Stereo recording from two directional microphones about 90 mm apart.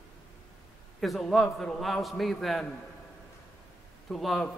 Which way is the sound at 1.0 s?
Centre (ahead or behind).